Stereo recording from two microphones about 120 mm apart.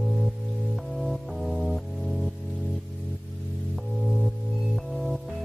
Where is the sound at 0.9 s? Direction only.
Centre (ahead or behind).